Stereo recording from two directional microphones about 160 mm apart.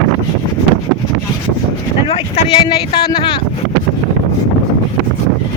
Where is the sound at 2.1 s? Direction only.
35° left (ahead or behind).